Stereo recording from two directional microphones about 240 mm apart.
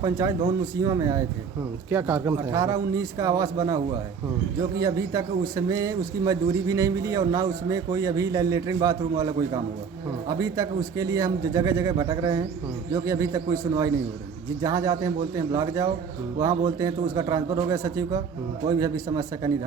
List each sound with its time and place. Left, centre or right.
0.0 s speech: centre
4.8 s speech: centre